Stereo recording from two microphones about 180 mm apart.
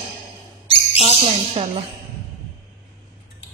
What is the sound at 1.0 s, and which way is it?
Speech, 35° right (ahead or behind).